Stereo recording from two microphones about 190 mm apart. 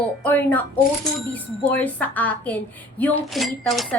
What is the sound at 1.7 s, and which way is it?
Speech, 10° left (ahead or behind).